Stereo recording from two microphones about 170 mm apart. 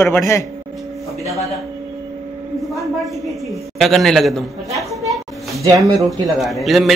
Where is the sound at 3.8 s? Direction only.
Centre (ahead or behind).